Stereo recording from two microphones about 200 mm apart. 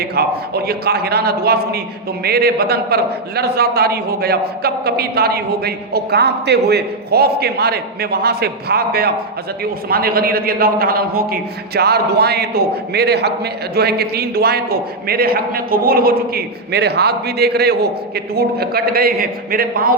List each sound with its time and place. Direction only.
0.0 s a man's voice: 50° right (ahead or behind)